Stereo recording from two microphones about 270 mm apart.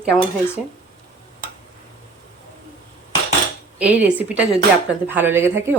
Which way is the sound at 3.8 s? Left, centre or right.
Centre.